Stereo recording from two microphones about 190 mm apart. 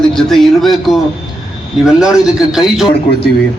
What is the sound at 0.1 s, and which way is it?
A man's voice, centre (ahead or behind).